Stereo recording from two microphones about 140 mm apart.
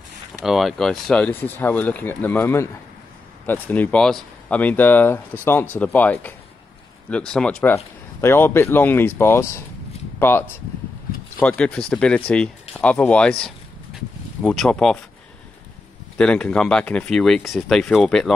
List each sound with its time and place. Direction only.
0.4 s speech: centre (ahead or behind)
7.7 s speech: 20° left (ahead or behind); by 15.0 s 5° left (ahead or behind)
16.2 s speech: 5° left (ahead or behind)